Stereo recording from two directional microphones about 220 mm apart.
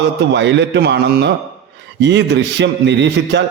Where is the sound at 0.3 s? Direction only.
55° right (ahead or behind).